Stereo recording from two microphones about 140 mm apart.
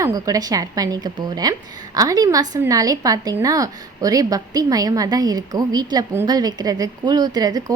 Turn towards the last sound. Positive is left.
turn(degrees=-25)  # may be behind; listen again after turning